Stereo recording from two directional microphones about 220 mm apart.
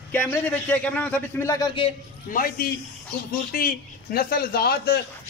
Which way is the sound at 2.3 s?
40° left (ahead or behind).